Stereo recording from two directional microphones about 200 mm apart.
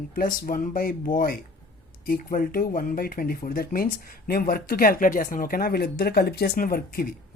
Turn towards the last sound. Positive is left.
turn(degrees=45)  # may be behind; listen again after turning